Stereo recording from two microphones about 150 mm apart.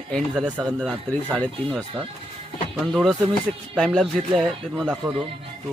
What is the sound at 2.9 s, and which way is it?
Speech, centre (ahead or behind).